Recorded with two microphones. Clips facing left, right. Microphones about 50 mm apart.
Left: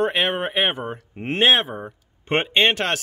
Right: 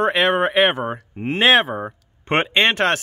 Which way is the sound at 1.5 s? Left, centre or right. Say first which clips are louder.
Right 6 dB; right.